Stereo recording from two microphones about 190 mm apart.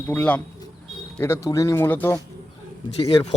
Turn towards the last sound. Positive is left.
turn(degrees=30)  # may be behind; listen again after turning